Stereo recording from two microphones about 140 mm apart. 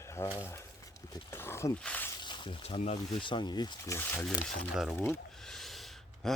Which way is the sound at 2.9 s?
35° left (ahead or behind).